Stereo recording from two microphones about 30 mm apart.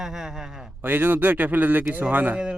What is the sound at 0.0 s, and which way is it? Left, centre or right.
Speech, centre.